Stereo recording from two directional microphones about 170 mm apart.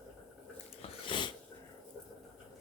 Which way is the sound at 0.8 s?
30° left (ahead or behind).